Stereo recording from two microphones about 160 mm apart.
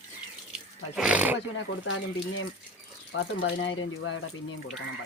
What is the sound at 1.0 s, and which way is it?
Speech, 5° right (ahead or behind).